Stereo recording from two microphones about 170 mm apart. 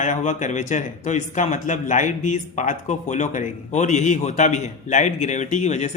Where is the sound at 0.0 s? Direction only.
45° left (ahead or behind).